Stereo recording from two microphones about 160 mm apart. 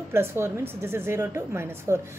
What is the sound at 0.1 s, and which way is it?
A woman's voice, 15° right (ahead or behind).